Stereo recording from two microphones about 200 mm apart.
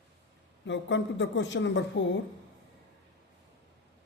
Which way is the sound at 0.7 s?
65° left (ahead or behind).